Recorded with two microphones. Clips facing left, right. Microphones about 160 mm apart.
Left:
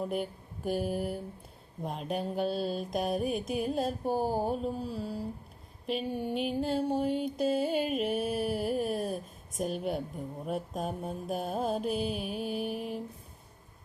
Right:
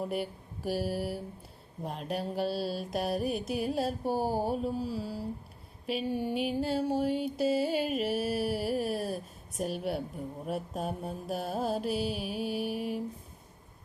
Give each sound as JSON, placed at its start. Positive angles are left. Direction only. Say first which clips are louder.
{"t": 0.1, "sound": "mantra", "louder": "even", "side_deg": -5}